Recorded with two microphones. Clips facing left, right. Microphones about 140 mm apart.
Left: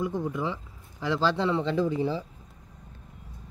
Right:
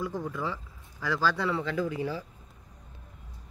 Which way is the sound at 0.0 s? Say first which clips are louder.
Left 4 dB; 20° left (ahead or behind).